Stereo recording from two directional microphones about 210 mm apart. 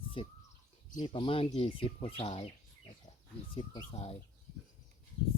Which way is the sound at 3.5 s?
25° left (ahead or behind).